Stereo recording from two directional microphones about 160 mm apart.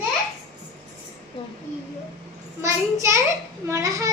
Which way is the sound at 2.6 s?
20° right (ahead or behind).